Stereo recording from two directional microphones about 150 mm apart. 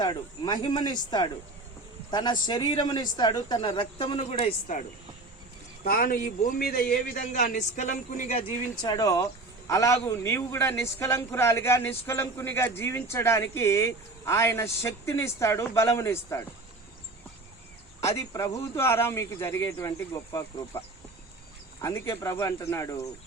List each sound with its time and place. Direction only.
0.0 s speech: 25° left (ahead or behind)
2.0 s speech: 30° left (ahead or behind)
3.7 s speech: 40° left (ahead or behind)
5.8 s a man's voice: 80° left; by 8.4 s 55° left (ahead or behind)
8.8 s a man's voice: 25° left (ahead or behind)
18.0 s speech: 20° left (ahead or behind)
21.8 s speech: 20° left (ahead or behind)